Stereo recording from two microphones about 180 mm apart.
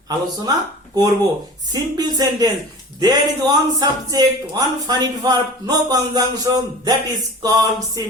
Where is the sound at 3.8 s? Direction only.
20° right (ahead or behind).